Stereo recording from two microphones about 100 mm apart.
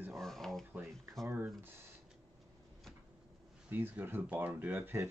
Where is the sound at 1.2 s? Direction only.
25° right (ahead or behind).